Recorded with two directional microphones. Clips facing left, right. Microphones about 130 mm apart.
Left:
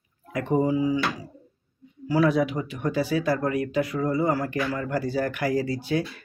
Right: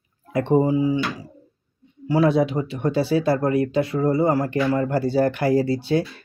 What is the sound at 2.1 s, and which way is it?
Speech, 25° right (ahead or behind).